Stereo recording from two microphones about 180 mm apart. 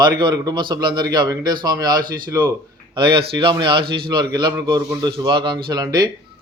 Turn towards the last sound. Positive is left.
turn(degrees=-20)  # may be behind; listen again after turning